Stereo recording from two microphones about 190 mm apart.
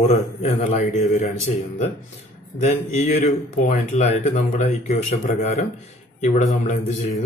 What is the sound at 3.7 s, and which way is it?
Speech, 35° left (ahead or behind).